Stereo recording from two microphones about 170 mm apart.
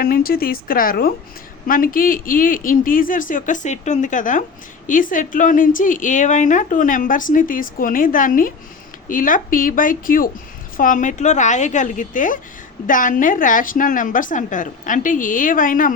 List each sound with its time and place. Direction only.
0.0 s a woman's voice: 60° left (ahead or behind)